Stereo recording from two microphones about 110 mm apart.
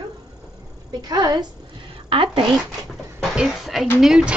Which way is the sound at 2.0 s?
55° right (ahead or behind).